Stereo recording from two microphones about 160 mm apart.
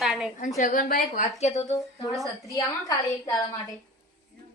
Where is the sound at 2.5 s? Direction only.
20° left (ahead or behind).